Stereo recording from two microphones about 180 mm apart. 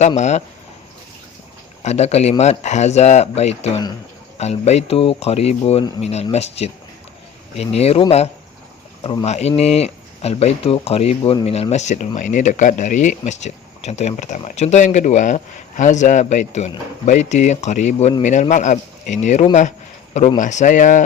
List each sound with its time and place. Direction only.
0.2 s speech: 40° left (ahead or behind)
1.8 s speech: 40° left (ahead or behind)
9.2 s speech: 35° left (ahead or behind)